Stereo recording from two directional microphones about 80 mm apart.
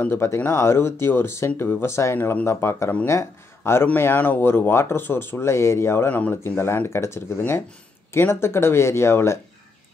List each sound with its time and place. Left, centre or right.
0.0 s speech: left